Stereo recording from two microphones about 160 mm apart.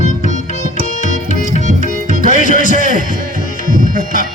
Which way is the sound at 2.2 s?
55° left (ahead or behind).